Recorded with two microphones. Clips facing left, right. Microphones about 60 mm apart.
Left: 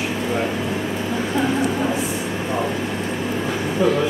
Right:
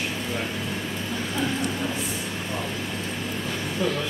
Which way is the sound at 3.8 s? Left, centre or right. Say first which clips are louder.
Left 8 dB; centre.